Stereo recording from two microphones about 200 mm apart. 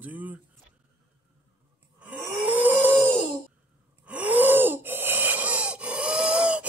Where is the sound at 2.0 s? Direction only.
10° right (ahead or behind).